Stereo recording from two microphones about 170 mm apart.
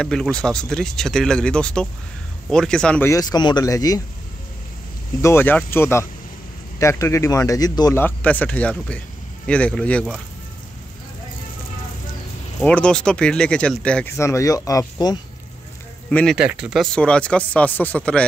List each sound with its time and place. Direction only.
0.0 s speech: 5° left (ahead or behind)
3.1 s speech: 20° left (ahead or behind)
5.2 s speech: 15° left (ahead or behind)
8.0 s speech: 10° left (ahead or behind)
12.6 s speech: 5° left (ahead or behind)
14.1 s speech: 15° left (ahead or behind)
16.1 s speech: 10° left (ahead or behind)
16.3 s speech: 5° right (ahead or behind)